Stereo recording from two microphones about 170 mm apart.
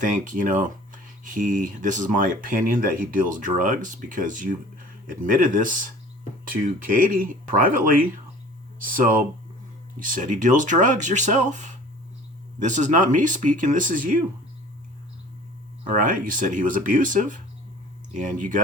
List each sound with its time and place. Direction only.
0.0 s speech: 50° right (ahead or behind)
15.8 s speech: 50° right (ahead or behind)